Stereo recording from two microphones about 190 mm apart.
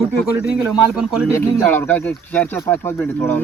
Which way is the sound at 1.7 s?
10° left (ahead or behind).